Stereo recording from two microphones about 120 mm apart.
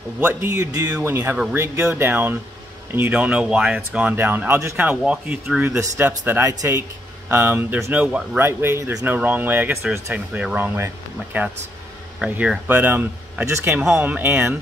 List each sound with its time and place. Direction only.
0.2 s speech: 15° right (ahead or behind)
0.7 s speech: 35° right (ahead or behind)
1.0 s speech: 20° right (ahead or behind)
5.7 s speech: 25° right (ahead or behind)
8.4 s speech: 20° right (ahead or behind)